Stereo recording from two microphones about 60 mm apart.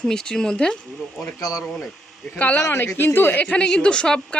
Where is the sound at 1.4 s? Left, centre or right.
Left.